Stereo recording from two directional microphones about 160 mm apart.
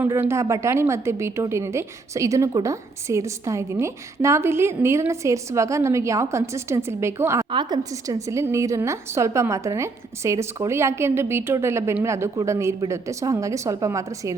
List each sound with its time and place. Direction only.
0.0 s a woman's voice: 15° right (ahead or behind)
7.5 s a woman's voice: 25° right (ahead or behind)